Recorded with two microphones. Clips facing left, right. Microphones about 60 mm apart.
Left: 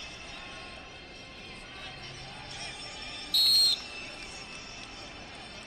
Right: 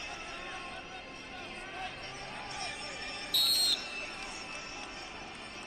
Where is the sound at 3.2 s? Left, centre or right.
Centre.